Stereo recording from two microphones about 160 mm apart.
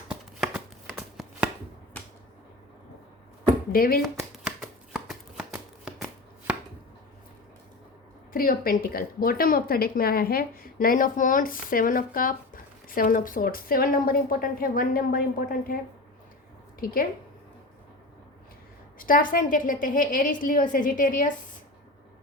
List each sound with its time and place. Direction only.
0.1 s a sound: 5° right (ahead or behind)
3.7 s speech: 65° left (ahead or behind)
4.4 s shuffling cards: 5° right (ahead or behind)
8.3 s speech: 60° left (ahead or behind)
16.8 s speech: 65° left (ahead or behind)
18.9 s speech: 60° left (ahead or behind)